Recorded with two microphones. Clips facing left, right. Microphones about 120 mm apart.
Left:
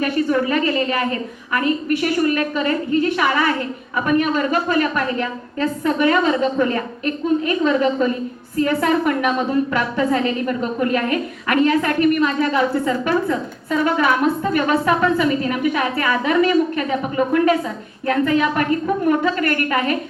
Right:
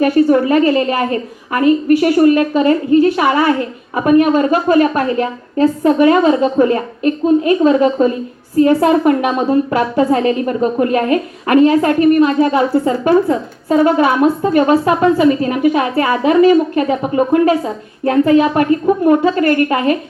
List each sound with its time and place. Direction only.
0.0 s a woman's voice: 40° right (ahead or behind)